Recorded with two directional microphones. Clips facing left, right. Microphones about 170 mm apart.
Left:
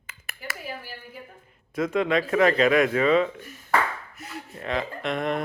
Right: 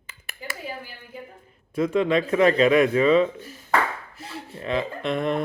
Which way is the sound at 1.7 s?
30° right (ahead or behind).